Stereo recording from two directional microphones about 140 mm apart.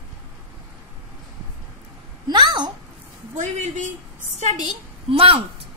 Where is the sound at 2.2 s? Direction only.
30° right (ahead or behind).